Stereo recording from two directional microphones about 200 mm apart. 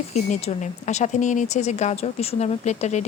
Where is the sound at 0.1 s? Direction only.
35° left (ahead or behind).